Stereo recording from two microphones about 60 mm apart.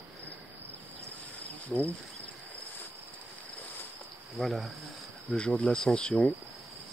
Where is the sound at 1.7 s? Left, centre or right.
Centre.